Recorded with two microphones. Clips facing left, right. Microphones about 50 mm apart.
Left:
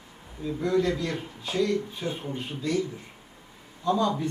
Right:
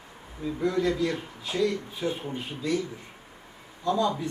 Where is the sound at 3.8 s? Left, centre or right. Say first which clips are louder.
Left 1 dB; left.